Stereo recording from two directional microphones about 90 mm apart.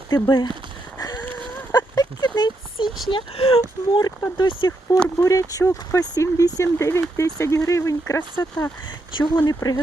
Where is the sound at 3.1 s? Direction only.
90° left.